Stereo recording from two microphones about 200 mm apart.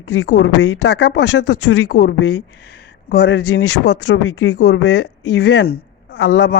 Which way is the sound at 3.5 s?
90° left.